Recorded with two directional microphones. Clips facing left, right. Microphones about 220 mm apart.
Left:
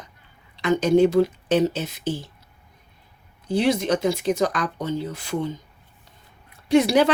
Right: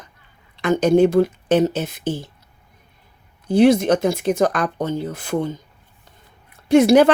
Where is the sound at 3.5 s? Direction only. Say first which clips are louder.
Right 7 dB; 50° right (ahead or behind).